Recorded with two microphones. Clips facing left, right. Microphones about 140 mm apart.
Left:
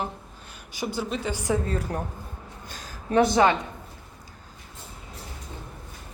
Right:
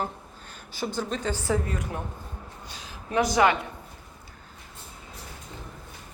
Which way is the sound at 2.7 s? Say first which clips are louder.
Left 6 dB; 45° left (ahead or behind).